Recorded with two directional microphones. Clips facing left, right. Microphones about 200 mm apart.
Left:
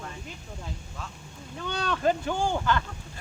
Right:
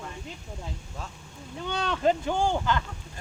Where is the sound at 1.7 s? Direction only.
20° right (ahead or behind).